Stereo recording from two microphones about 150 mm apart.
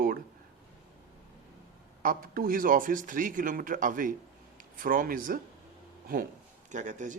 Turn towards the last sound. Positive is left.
turn(degrees=-55)  # may be behind; listen again after turning